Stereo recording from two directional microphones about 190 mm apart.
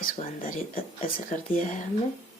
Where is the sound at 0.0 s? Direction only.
45° left (ahead or behind).